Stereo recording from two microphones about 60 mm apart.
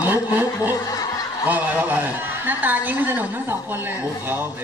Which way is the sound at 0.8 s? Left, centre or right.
Left.